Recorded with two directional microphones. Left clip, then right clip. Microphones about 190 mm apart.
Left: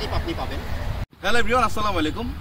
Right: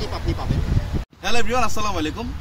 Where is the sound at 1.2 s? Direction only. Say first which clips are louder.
Left 2 dB; 15° right (ahead or behind).